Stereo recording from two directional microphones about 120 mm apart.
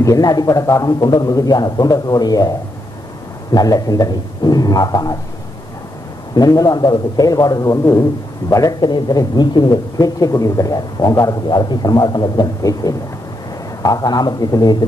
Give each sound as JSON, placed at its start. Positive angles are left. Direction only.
{"t": 0.0, "sound": "a man's voice", "side_deg": 30}
{"t": 3.5, "sound": "a man's voice", "side_deg": 30}
{"t": 6.3, "sound": "a man's voice", "side_deg": 30}